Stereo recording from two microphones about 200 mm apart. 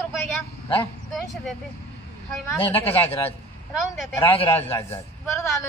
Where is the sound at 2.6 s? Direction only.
30° left (ahead or behind).